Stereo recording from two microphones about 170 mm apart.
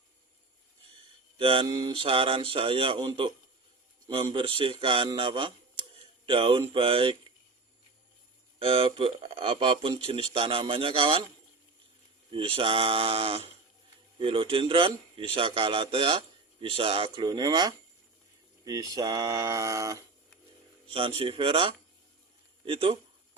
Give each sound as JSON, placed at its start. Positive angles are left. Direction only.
{"t": 1.4, "sound": "a man's voice", "side_deg": -30}
{"t": 8.5, "sound": "a man's voice", "side_deg": -35}
{"t": 12.3, "sound": "a man's voice", "side_deg": -30}
{"t": 20.8, "sound": "a man's voice", "side_deg": -30}